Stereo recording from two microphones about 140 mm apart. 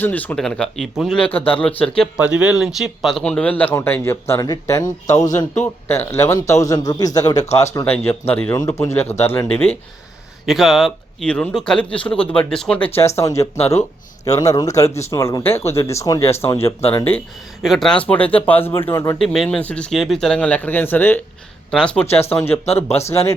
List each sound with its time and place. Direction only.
0.0 s speech: 10° left (ahead or behind)
2.1 s speech: 5° right (ahead or behind); by 9.5 s 15° left (ahead or behind)
10.4 s speech: centre (ahead or behind); by 13.5 s 20° left (ahead or behind)
13.6 s speech: 50° left (ahead or behind)
14.3 s speech: 25° left (ahead or behind)
17.6 s speech: centre (ahead or behind); by 19.1 s 20° left (ahead or behind)
19.2 s speech: centre (ahead or behind)
22.1 s speech: 15° left (ahead or behind)